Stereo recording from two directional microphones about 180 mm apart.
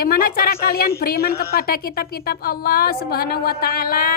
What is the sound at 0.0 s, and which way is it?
Speech, 55° left (ahead or behind).